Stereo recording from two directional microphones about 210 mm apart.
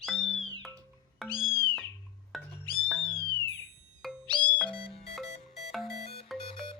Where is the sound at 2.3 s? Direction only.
Centre (ahead or behind).